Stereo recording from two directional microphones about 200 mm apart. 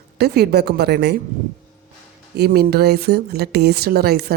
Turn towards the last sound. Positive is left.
turn(degrees=-50)  # may be behind; listen again after turning